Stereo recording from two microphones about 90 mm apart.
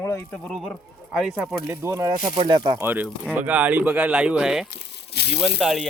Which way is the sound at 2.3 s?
65° right (ahead or behind).